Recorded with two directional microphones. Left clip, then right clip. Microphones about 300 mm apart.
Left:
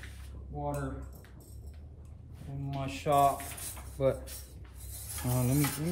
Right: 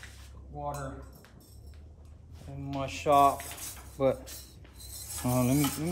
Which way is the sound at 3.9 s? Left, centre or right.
Right.